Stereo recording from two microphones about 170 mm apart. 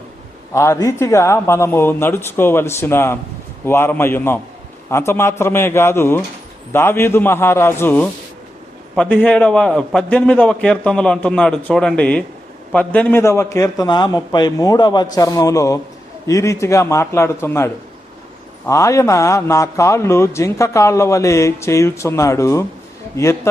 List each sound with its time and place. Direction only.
0.5 s a man's voice: 15° left (ahead or behind)